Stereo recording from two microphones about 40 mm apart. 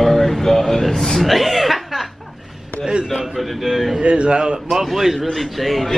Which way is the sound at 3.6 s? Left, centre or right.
Centre.